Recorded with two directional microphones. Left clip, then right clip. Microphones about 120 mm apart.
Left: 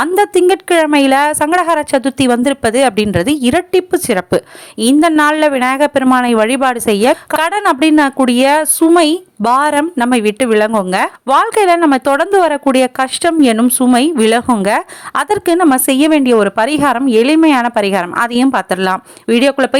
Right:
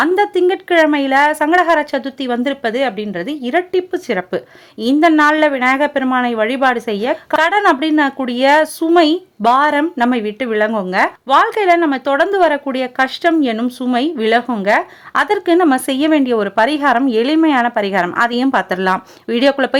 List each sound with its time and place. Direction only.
0.0 s speech: 35° left (ahead or behind); by 19.8 s 20° left (ahead or behind)